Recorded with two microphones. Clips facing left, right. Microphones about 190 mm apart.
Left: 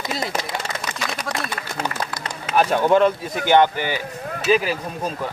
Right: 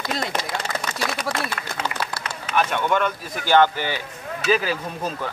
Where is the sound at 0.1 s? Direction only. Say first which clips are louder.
Even; 5° left (ahead or behind).